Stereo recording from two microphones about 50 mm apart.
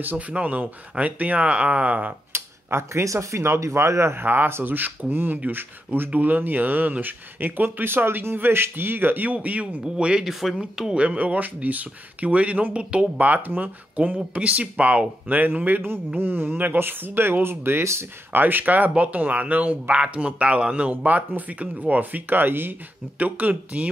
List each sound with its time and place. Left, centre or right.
0.3 s speech: right
2.3 s speech: right
9.8 s speech: centre; by 18.0 s right
18.3 s speech: right
23.1 s speech: right